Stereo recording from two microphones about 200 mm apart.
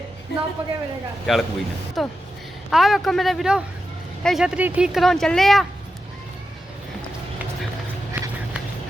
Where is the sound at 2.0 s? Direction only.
Centre (ahead or behind).